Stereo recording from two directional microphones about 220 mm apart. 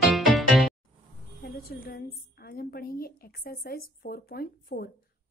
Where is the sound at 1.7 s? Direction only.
45° left (ahead or behind).